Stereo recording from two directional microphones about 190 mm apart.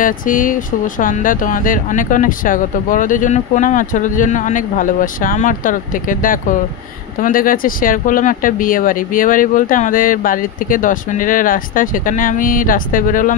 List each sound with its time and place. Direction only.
0.0 s speech: 45° left (ahead or behind)